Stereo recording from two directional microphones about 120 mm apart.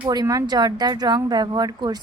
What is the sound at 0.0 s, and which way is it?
A woman's voice, 35° right (ahead or behind).